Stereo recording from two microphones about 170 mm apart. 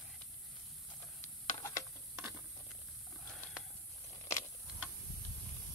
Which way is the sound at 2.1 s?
15° right (ahead or behind).